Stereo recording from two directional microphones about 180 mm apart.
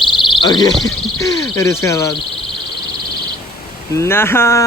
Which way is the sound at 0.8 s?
20° left (ahead or behind).